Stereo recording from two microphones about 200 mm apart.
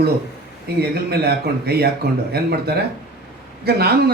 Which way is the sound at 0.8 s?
50° right (ahead or behind).